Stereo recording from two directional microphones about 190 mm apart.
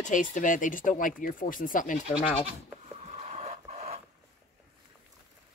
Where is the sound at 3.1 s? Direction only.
35° right (ahead or behind).